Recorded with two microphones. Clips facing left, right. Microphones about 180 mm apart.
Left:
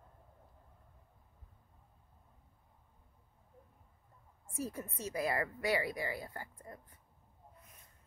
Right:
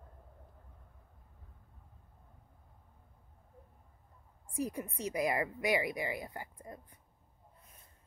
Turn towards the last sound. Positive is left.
turn(degrees=-20)  # may be behind; listen again after turning